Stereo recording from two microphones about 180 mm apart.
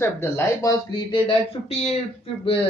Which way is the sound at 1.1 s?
30° left (ahead or behind).